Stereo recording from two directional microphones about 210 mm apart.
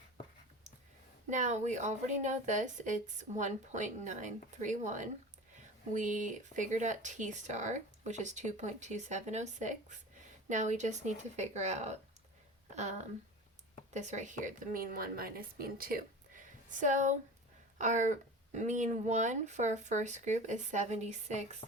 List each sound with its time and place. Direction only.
1.3 s speech: 35° right (ahead or behind)
21.6 s speech: 35° left (ahead or behind)